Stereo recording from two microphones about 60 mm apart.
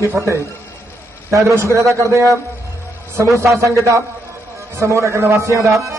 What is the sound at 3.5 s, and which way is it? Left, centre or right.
A man's voice, right.